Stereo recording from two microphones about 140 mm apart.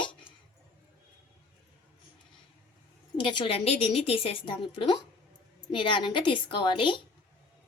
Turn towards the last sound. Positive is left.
turn(degrees=35)  # may be behind; listen again after turning